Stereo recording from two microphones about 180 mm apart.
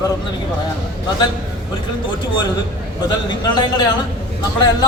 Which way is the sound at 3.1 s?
25° left (ahead or behind).